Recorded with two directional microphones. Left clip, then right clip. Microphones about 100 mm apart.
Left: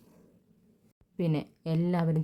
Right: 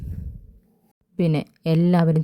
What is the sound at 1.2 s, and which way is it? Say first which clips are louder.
A woman's voice: right 8 dB; 80° right.